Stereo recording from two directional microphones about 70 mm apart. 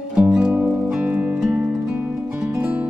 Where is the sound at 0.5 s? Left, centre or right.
Right.